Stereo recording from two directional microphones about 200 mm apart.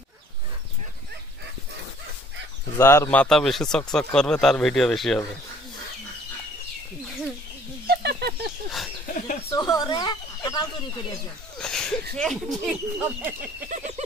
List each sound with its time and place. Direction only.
2.8 s speech: 15° left (ahead or behind)
7.8 s bird: 55° right (ahead or behind)
9.5 s speech: 20° left (ahead or behind)
11.5 s speech: 5° left (ahead or behind)
13.7 s a sound: 35° right (ahead or behind)